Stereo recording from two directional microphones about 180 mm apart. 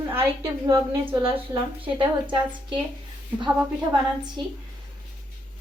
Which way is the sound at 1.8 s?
25° right (ahead or behind).